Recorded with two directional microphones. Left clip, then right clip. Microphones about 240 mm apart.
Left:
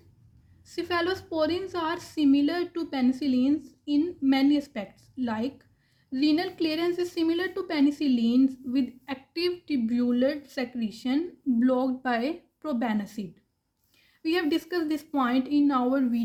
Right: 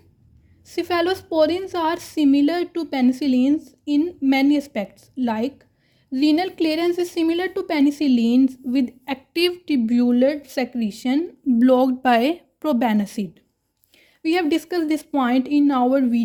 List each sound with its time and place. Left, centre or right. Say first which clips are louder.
0.6 s a woman's voice: right 7 dB; right